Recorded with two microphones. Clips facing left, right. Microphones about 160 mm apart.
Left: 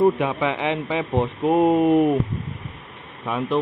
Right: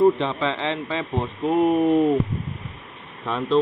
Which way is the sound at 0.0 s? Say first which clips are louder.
Even; 10° left (ahead or behind).